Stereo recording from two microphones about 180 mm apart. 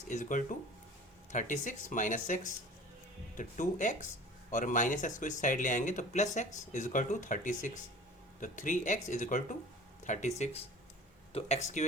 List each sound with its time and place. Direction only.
0.1 s speech: 45° left (ahead or behind)